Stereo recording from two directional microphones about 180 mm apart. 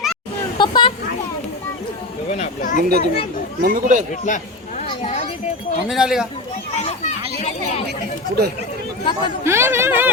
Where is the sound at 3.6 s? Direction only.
45° right (ahead or behind).